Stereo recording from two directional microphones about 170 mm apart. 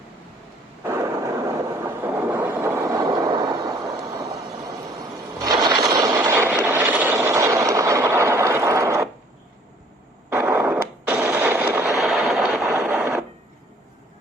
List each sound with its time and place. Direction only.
0.9 s train: 15° right (ahead or behind)
4.9 s vehicle: 20° right (ahead or behind)
10.2 s radio: 15° right (ahead or behind)